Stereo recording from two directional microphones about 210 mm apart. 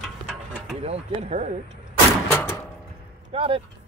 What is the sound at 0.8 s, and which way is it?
Speech, 30° right (ahead or behind).